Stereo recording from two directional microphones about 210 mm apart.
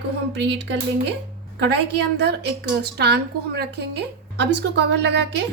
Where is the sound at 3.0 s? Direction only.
50° right (ahead or behind).